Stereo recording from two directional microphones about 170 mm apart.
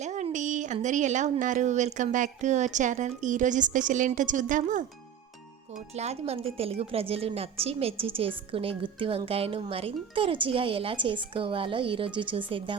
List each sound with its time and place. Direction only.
0.0 s speech: 45° right (ahead or behind)
5.9 s a woman's voice: 40° right (ahead or behind)